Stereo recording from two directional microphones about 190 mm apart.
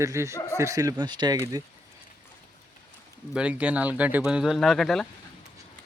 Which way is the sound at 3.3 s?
5° right (ahead or behind).